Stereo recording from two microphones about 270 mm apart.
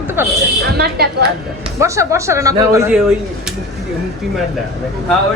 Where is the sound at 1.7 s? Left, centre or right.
Centre.